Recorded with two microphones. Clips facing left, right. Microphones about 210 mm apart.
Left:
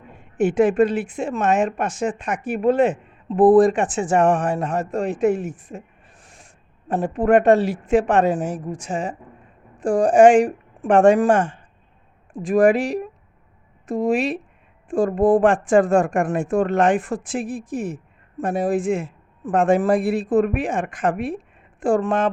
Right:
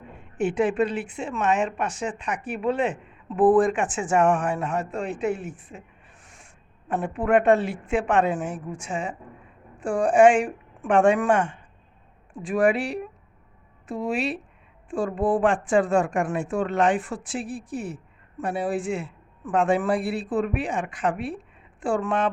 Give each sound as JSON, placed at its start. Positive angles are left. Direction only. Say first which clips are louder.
{"t": 0.5, "sound": "a woman's voice", "louder": "left 7 dB", "side_deg": 45}